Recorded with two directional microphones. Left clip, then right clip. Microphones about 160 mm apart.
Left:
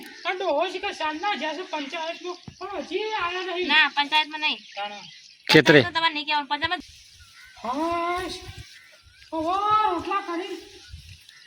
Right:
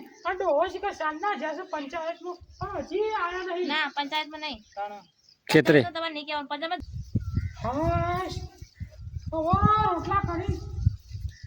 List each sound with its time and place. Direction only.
0.3 s speech: centre (ahead or behind)
2.3 s speech: 15° left (ahead or behind)
3.7 s speech: 45° right (ahead or behind)
4.7 s speech: 15° left (ahead or behind)
5.5 s speech: 5° right (ahead or behind)
5.9 s a woman's voice: 65° right (ahead or behind)
7.6 s speech: centre (ahead or behind)
9.3 s speech: centre (ahead or behind)